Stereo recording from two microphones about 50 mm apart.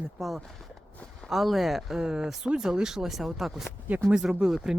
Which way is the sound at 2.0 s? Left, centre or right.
Centre.